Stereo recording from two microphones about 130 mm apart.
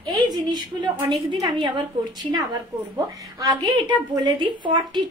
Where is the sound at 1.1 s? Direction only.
35° right (ahead or behind).